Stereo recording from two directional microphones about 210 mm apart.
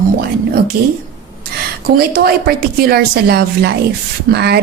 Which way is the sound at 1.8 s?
45° right (ahead or behind).